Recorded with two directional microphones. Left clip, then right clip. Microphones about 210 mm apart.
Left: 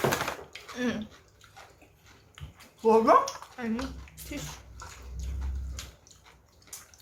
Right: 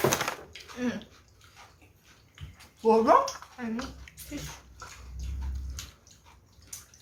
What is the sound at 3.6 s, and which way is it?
Speech, 45° left (ahead or behind).